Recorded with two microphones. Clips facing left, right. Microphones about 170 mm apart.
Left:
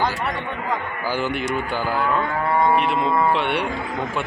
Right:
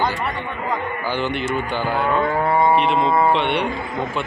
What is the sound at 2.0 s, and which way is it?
Livestock, 25° right (ahead or behind).